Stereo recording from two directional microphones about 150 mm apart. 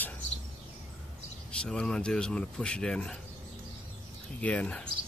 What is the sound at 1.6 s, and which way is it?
Speech, 5° left (ahead or behind).